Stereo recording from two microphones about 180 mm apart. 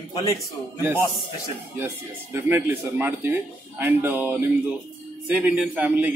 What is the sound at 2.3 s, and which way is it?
A man's voice, 10° right (ahead or behind).